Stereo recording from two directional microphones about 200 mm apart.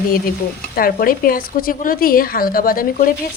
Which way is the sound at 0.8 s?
45° left (ahead or behind).